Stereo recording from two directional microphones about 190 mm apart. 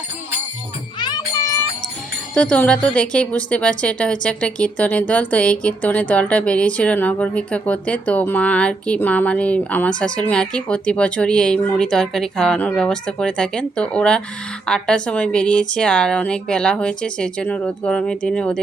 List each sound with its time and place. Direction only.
0.9 s music: 20° left (ahead or behind)
2.3 s a woman's voice: 5° left (ahead or behind)